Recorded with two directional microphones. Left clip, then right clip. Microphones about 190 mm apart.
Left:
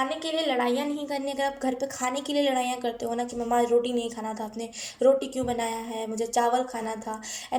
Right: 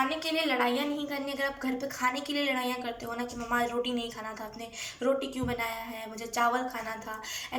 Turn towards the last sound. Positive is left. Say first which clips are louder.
# left 5 dB
turn(degrees=30)  # may be behind; listen again after turning